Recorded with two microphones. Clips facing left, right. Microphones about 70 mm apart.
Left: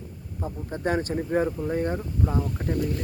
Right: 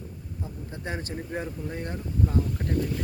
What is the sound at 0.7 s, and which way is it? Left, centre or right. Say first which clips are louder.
Speech: left 10 dB; left.